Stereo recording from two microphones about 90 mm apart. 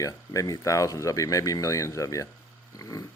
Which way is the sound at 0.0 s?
40° left (ahead or behind).